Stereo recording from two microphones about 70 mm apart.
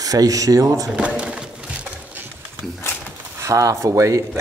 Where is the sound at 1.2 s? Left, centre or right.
Centre.